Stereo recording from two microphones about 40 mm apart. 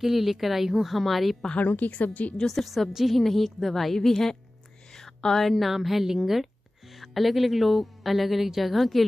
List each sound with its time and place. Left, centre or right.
0.0 s a woman's voice: centre
1.6 s a woman's voice: left
2.3 s a woman's voice: centre
4.9 s a sound: centre
5.5 s a woman's voice: centre